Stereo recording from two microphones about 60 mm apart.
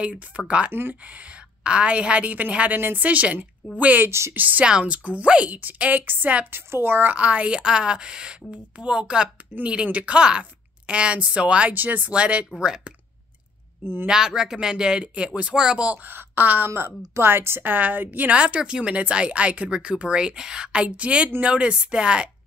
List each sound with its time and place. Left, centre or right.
0.5 s a woman's voice: right
4.6 s a woman's voice: centre; by 7.2 s right
7.2 s a woman's voice: right
11.7 s a woman's voice: right
12.0 s a woman's voice: centre
14.0 s speech: centre
15.9 s a woman's voice: right
18.3 s speech: centre